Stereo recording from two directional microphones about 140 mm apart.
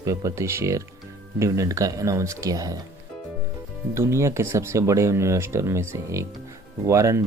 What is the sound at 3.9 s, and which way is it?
Speech, 20° right (ahead or behind).